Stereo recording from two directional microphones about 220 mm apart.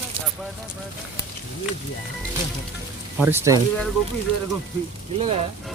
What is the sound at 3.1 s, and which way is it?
Speech, 10° right (ahead or behind).